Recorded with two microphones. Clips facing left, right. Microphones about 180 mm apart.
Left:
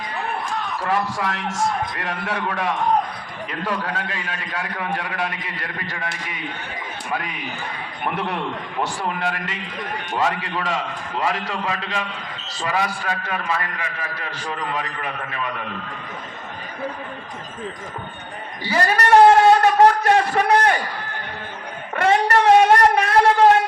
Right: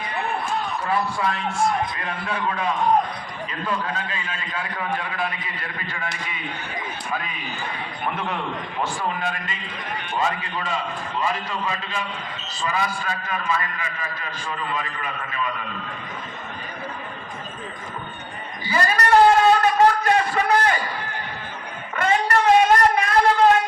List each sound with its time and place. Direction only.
0.9 s a man's voice: 90° left; by 5.9 s 75° left (ahead or behind)
7.1 s a man's voice: 65° left (ahead or behind)
9.0 s a man's voice: 75° left (ahead or behind)
12.5 s a man's voice: 75° left (ahead or behind)
15.3 s a man's voice: 60° left (ahead or behind)
18.8 s a sound: 60° left (ahead or behind)
20.1 s a man's voice: 65° left (ahead or behind)
22.0 s a sound: 70° left (ahead or behind)